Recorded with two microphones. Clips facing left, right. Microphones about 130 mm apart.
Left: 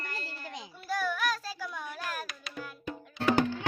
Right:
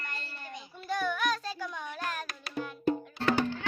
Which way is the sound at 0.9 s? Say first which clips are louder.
Right 1 dB; 5° left (ahead or behind).